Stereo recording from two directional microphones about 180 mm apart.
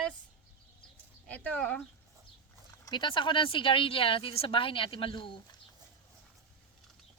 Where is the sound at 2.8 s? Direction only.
25° left (ahead or behind).